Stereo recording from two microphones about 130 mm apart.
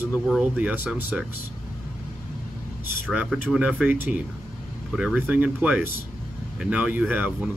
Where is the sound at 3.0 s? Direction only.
10° right (ahead or behind).